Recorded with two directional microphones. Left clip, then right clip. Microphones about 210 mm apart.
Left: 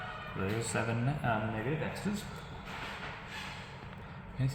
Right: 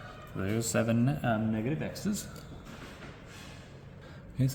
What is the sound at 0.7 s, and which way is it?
Speech, 90° right.